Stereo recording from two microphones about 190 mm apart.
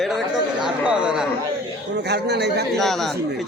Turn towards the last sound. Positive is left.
turn(degrees=0)  # may be behind; listen again after turning